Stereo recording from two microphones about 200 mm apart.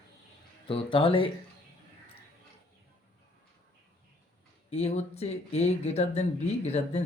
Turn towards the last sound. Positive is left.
turn(degrees=35)  # may be behind; listen again after turning